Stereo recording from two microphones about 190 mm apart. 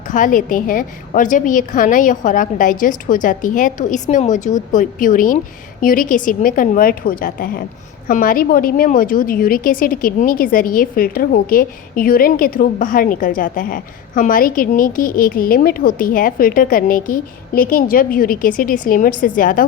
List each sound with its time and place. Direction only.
0.1 s a woman's voice: 45° left (ahead or behind)